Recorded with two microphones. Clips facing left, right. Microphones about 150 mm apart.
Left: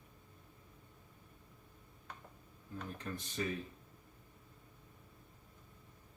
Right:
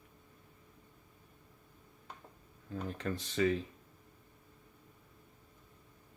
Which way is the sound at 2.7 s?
90° right.